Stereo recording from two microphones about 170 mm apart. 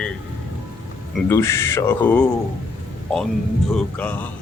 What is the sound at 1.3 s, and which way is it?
Speech, 15° left (ahead or behind).